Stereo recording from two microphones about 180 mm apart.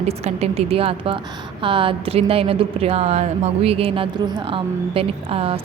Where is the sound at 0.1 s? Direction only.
35° right (ahead or behind).